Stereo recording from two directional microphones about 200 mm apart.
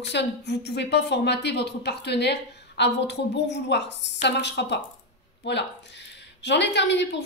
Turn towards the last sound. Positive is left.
turn(degrees=60)  # may be behind; listen again after turning